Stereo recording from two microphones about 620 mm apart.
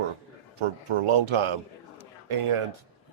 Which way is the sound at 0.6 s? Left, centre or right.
Right.